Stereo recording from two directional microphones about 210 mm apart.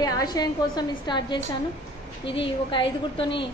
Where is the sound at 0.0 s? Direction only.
20° left (ahead or behind).